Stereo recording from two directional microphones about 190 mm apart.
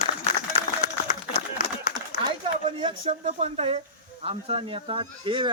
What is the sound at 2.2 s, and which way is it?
Speech, 30° right (ahead or behind).